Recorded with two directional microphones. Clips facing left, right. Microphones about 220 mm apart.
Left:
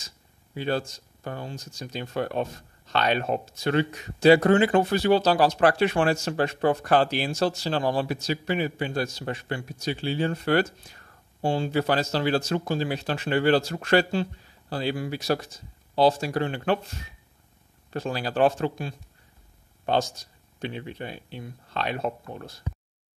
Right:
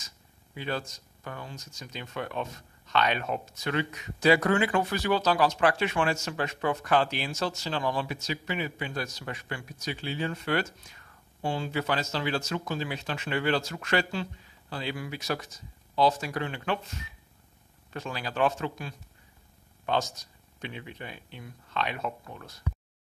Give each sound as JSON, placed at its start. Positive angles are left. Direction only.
{"t": 0.6, "sound": "speech", "side_deg": 30}
{"t": 17.9, "sound": "speech", "side_deg": 35}